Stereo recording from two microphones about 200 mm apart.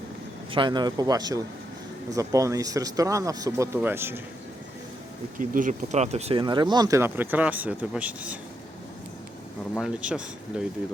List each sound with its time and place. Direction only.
0.5 s speech: 25° right (ahead or behind)
5.4 s speech: 40° right (ahead or behind); by 8.4 s 5° right (ahead or behind)
9.8 s speech: 5° right (ahead or behind)